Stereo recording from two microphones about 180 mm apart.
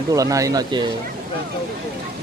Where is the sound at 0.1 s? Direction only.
20° right (ahead or behind).